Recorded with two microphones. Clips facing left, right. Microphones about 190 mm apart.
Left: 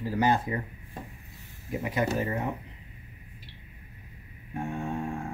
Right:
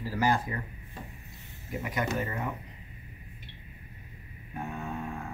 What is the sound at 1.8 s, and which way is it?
Speech, 25° left (ahead or behind).